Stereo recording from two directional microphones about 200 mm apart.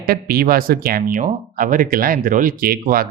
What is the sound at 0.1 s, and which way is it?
Speech, 50° right (ahead or behind).